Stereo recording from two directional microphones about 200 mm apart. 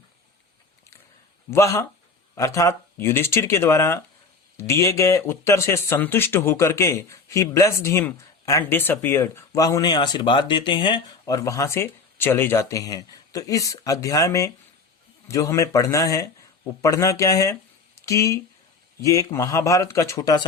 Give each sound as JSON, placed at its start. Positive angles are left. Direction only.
{"t": 1.5, "sound": "speech", "side_deg": 15}